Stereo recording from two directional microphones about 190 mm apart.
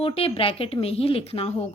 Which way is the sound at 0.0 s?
30° left (ahead or behind).